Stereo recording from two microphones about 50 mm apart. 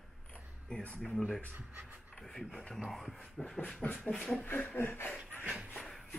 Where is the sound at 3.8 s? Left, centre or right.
Left.